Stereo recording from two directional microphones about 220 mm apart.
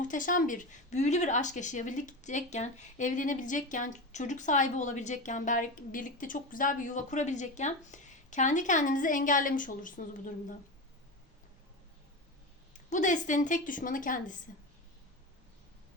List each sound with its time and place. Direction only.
0.0 s speech: 35° left (ahead or behind)
12.7 s speech: 35° left (ahead or behind)